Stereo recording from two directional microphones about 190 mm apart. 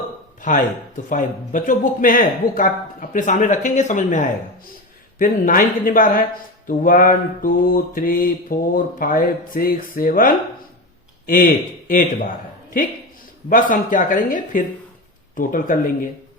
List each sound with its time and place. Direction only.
1.1 s mantra: 45° left (ahead or behind)
13.5 s mantra: 45° left (ahead or behind)